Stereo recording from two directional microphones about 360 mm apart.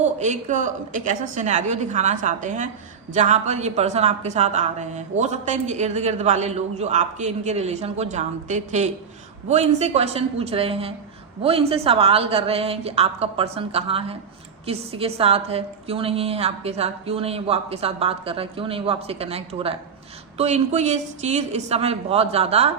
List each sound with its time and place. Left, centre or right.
0.0 s a woman's voice: centre